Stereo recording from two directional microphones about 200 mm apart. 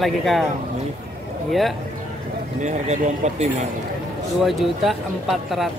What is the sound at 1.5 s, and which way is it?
Speech, centre (ahead or behind).